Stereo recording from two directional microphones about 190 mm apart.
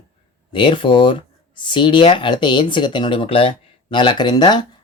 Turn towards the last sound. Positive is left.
turn(degrees=20)  # may be behind; listen again after turning